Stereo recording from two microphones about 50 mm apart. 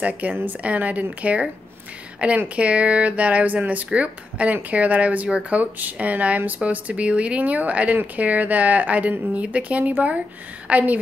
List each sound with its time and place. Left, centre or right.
0.0 s speech: right